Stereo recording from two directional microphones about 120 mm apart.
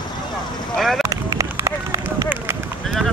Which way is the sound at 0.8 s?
Centre (ahead or behind).